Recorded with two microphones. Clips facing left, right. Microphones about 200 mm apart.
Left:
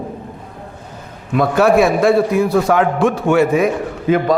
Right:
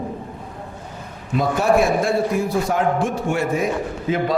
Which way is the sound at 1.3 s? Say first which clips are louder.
Left 5 dB; 75° left (ahead or behind).